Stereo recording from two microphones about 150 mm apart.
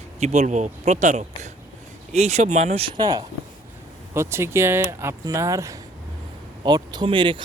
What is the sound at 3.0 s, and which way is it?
A man's voice, 25° right (ahead or behind).